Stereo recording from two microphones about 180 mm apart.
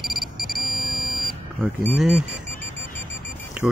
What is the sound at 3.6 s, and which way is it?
Mechanisms, 5° right (ahead or behind).